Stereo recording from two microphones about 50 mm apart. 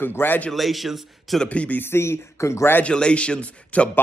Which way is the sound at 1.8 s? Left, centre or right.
Left.